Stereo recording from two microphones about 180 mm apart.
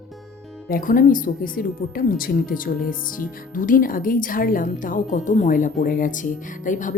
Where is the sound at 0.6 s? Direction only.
55° left (ahead or behind).